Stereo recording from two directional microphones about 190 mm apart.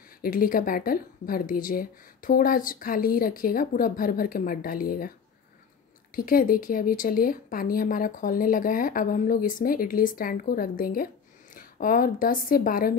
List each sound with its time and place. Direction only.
0.2 s a woman's voice: 50° left (ahead or behind)
6.1 s a woman's voice: 50° left (ahead or behind)